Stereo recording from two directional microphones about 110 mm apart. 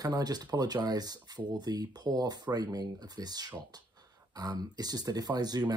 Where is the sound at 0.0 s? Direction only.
35° right (ahead or behind).